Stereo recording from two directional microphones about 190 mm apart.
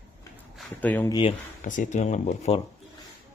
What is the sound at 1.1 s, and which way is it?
Speech, 25° left (ahead or behind).